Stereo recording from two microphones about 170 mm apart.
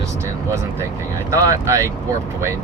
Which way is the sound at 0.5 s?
15° right (ahead or behind).